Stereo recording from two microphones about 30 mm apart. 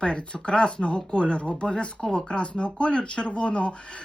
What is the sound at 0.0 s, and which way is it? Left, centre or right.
Speech, left.